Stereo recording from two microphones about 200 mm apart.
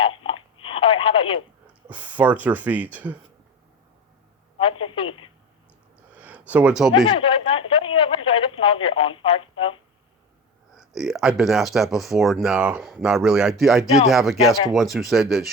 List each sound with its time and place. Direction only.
0.6 s telephone: 25° left (ahead or behind)
1.6 s speech: 5° right (ahead or behind)
4.9 s speech: 25° left (ahead or behind)
6.1 s a sound: 5° right (ahead or behind)
6.9 s speech: 20° left (ahead or behind)
10.8 s speech: centre (ahead or behind)